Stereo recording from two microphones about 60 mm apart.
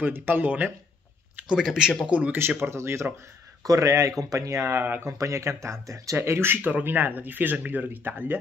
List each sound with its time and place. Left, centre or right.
0.0 s speech: right
1.6 s speech: centre
2.0 s speech: right
2.3 s speech: right
3.6 s speech: right
4.6 s speech: right
5.1 s speech: right
6.1 s speech: right